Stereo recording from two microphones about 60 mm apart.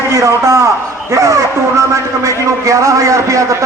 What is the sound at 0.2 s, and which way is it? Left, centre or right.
A man's voice, right.